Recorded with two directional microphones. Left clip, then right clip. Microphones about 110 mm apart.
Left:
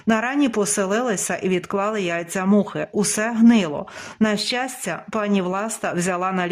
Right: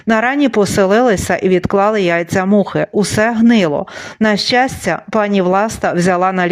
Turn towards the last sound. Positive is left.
turn(degrees=-40)  # may be behind; listen again after turning